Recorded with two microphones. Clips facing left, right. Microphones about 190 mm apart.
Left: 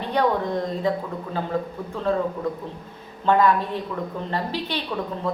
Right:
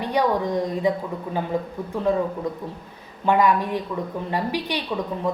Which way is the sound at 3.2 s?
15° right (ahead or behind).